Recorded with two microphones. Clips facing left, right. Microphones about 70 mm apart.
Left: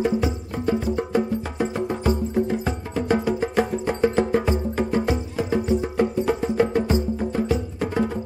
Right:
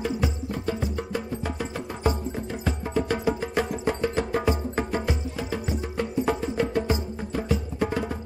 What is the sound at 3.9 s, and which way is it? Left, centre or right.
Music, left.